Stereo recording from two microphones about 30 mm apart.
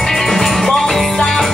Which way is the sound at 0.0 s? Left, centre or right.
Centre.